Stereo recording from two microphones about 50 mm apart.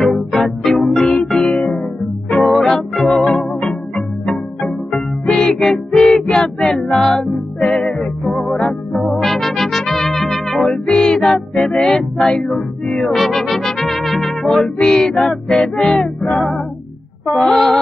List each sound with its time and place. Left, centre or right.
0.0 s music: centre
4.9 s music: centre
6.2 s child singing: centre
7.6 s music: centre
9.1 s music: centre
13.3 s music: centre
17.4 s music: centre